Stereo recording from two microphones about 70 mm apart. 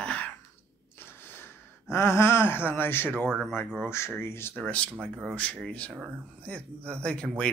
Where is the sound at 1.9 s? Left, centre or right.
Left.